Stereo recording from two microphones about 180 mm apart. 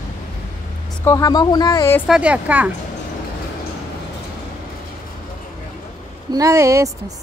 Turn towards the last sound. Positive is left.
turn(degrees=-15)  # may be behind; listen again after turning